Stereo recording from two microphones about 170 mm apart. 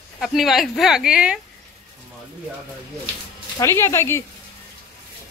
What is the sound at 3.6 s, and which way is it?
Speech, 15° left (ahead or behind).